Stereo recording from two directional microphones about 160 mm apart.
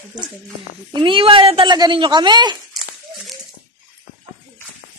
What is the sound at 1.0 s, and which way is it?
Speech, 35° right (ahead or behind).